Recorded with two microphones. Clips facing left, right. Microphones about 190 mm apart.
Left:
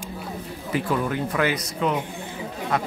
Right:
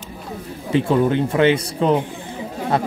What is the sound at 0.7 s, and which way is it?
Speech, 25° right (ahead or behind).